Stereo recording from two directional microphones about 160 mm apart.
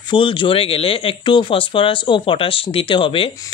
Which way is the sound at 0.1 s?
30° left (ahead or behind).